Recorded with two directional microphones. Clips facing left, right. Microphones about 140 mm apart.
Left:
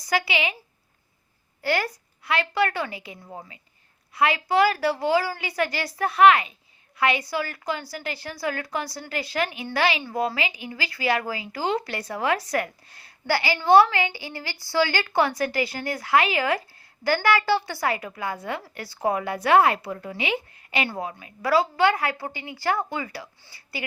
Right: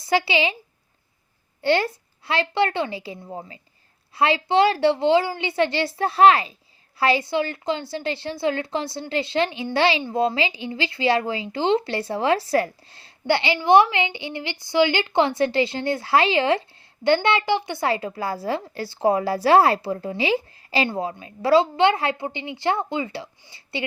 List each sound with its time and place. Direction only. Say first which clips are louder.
0.0 s a woman's voice: right 4 dB; 30° right (ahead or behind)
1.6 s a woman's voice: right 5 dB; 25° right (ahead or behind)